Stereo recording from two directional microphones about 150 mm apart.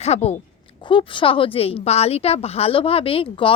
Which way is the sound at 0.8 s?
35° left (ahead or behind).